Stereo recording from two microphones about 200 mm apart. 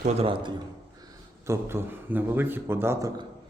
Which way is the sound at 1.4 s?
15° right (ahead or behind).